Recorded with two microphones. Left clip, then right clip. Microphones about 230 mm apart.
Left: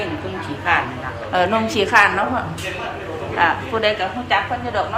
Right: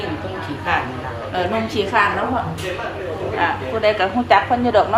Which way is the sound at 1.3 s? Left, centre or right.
Centre.